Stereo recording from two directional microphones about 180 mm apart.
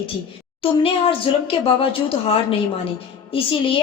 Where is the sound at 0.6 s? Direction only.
30° left (ahead or behind).